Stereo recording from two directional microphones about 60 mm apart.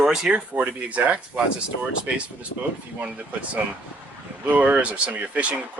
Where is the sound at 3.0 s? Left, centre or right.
Right.